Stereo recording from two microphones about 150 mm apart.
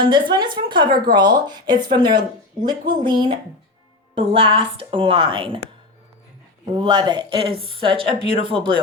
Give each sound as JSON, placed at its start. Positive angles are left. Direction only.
{"t": 0.0, "sound": "a woman's voice", "side_deg": -30}
{"t": 6.7, "sound": "a woman's voice", "side_deg": -30}